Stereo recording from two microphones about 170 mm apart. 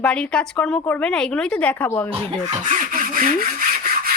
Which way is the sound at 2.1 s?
45° right (ahead or behind).